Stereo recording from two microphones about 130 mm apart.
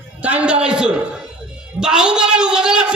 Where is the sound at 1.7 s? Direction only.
5° right (ahead or behind).